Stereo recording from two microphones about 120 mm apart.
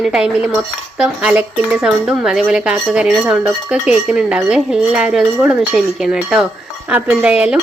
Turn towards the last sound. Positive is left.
turn(degrees=-10)  # may be behind; listen again after turning